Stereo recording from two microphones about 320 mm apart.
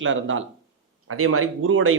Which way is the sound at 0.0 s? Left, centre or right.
Right.